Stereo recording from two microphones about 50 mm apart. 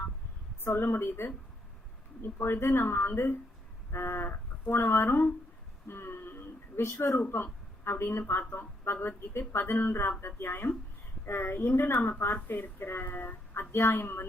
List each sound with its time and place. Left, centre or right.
0.6 s speech: left
5.9 s a sound: left
6.8 s speech: left
7.2 s speech: left